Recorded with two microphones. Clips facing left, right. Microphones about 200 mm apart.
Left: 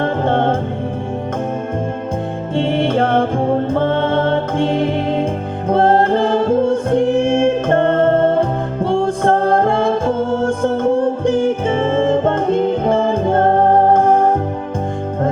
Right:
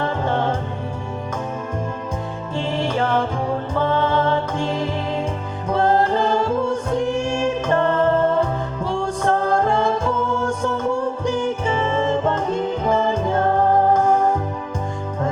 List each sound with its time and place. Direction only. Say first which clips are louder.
0.0 s music: left 5 dB; 60° left (ahead or behind)
2.6 s music: left 6 dB; 55° left (ahead or behind)